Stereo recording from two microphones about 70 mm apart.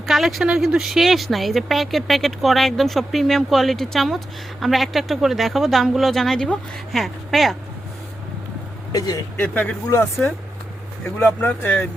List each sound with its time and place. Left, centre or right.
0.0 s speech: centre
8.9 s speech: left
10.0 s speech: left